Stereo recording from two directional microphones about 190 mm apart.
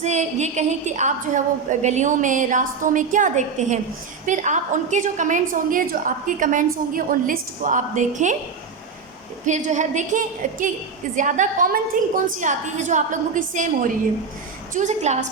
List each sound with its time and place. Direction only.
0.0 s a woman's voice: 35° right (ahead or behind)
9.5 s a woman's voice: 40° right (ahead or behind)